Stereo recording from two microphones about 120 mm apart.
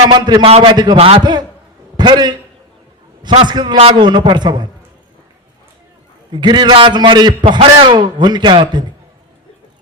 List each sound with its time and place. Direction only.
0.1 s a man's voice: 35° right (ahead or behind)
0.4 s a man's voice: 55° right (ahead or behind)
0.7 s a man's voice: 35° right (ahead or behind)
0.9 s a man's voice: 55° right (ahead or behind)
1.2 s a man's voice: 35° right (ahead or behind)
3.4 s a man's voice: 35° right (ahead or behind)
6.3 s a man's voice: 40° right (ahead or behind)